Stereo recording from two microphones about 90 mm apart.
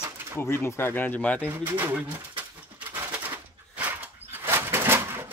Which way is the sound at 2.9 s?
20° right (ahead or behind).